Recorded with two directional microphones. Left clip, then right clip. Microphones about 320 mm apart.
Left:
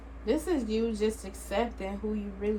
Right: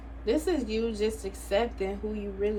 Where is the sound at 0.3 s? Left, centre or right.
Centre.